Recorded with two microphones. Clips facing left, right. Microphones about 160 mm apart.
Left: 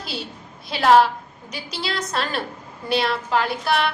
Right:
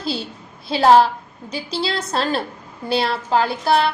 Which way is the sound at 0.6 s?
30° right (ahead or behind).